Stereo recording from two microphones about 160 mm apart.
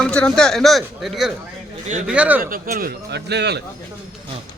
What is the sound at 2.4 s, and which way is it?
A man's voice, 60° right (ahead or behind).